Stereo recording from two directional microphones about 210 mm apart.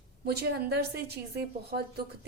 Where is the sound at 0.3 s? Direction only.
50° right (ahead or behind).